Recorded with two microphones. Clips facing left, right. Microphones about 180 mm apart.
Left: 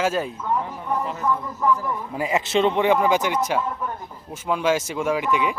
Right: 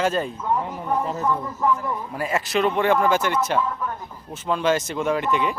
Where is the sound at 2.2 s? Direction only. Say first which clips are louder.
Left 2 dB; 20° left (ahead or behind).